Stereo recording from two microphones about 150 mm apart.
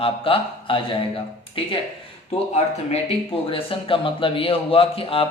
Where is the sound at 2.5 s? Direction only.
45° left (ahead or behind).